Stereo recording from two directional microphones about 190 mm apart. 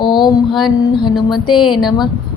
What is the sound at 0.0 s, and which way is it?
Mantra, 25° left (ahead or behind).